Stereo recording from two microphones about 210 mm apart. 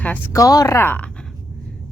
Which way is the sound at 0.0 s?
10° left (ahead or behind).